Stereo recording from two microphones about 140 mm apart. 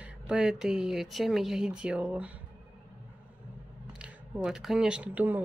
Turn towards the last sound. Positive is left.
turn(degrees=-10)  # may be behind; listen again after turning